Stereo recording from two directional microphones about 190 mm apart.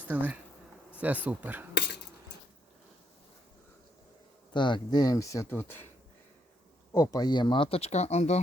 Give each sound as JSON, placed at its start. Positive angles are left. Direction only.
{"t": 0.1, "sound": "speech", "side_deg": -10}
{"t": 4.5, "sound": "speech", "side_deg": 25}
{"t": 6.9, "sound": "speech", "side_deg": 15}